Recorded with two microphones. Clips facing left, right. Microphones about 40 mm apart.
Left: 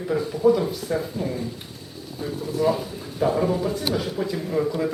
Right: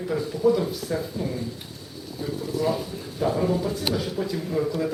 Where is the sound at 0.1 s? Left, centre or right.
Centre.